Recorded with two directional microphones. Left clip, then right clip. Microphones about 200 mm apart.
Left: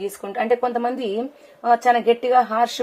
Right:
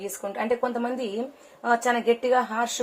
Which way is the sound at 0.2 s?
40° left (ahead or behind).